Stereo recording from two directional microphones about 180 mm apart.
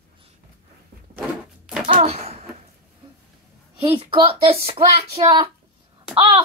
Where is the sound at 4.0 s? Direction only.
30° right (ahead or behind).